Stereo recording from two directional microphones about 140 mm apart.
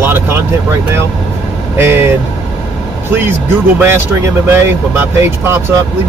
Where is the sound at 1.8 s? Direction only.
20° right (ahead or behind).